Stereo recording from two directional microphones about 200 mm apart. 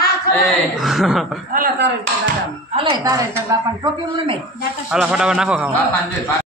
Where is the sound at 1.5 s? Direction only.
45° right (ahead or behind).